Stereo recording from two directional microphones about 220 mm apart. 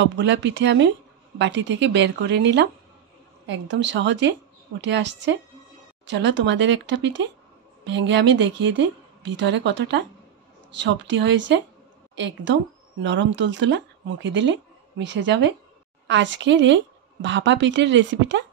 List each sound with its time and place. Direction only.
0.0 s speech: 55° right (ahead or behind)
13.0 s speech: 55° right (ahead or behind)